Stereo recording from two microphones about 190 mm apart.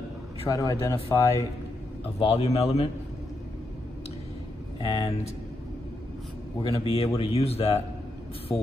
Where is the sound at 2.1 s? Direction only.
30° left (ahead or behind).